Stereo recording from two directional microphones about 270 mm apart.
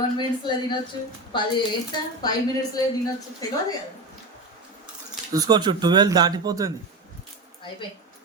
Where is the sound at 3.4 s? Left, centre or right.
Centre.